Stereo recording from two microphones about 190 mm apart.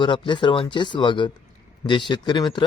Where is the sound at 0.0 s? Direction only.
25° left (ahead or behind).